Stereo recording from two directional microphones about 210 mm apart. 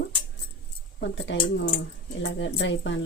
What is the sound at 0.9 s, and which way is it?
Speech, 60° left (ahead or behind).